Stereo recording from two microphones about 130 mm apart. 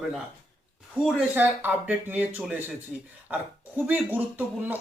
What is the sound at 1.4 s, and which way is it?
Speech, 15° right (ahead or behind).